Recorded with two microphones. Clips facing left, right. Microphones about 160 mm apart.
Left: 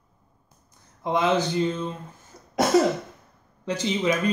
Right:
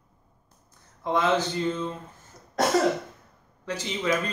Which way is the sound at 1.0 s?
15° left (ahead or behind).